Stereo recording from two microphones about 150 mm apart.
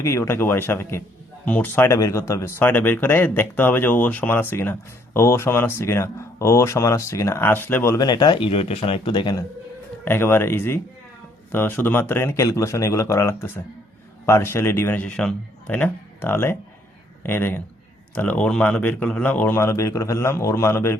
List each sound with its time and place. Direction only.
0.0 s speech: 20° left (ahead or behind)
10.0 s speech: 15° left (ahead or behind)